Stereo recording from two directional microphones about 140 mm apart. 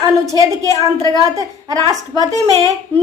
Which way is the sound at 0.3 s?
25° right (ahead or behind).